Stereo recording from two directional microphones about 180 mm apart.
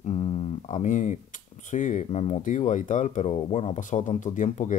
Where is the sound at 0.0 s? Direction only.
35° left (ahead or behind).